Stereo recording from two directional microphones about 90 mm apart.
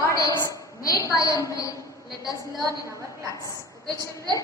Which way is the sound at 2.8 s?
35° right (ahead or behind).